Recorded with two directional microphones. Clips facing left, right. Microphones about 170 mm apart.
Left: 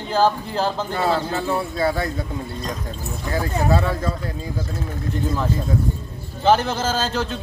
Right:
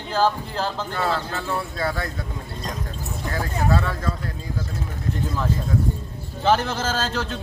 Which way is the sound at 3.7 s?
15° left (ahead or behind).